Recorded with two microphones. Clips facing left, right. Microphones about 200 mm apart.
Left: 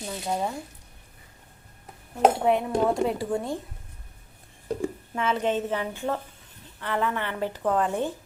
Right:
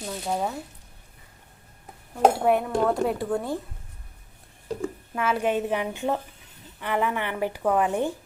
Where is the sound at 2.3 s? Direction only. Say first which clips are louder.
Right 1 dB; 5° right (ahead or behind).